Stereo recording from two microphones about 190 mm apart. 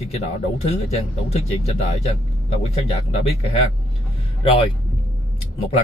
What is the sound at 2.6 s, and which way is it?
Speech, 35° left (ahead or behind).